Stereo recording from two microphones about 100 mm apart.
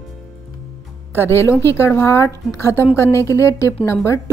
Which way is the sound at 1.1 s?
25° left (ahead or behind).